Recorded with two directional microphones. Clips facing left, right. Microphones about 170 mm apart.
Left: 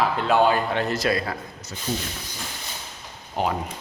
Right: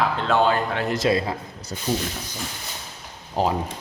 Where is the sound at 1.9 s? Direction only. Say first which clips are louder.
Right 4 dB; 55° right (ahead or behind).